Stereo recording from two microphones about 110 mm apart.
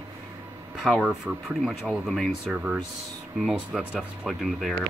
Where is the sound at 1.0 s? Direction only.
5° right (ahead or behind).